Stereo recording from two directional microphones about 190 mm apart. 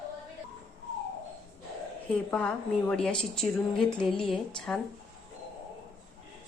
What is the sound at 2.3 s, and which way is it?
A woman's voice, 5° left (ahead or behind).